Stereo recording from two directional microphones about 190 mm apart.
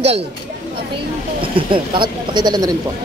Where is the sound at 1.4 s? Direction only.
25° right (ahead or behind).